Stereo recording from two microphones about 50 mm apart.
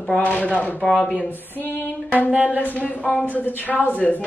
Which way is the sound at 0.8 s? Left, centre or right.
Centre.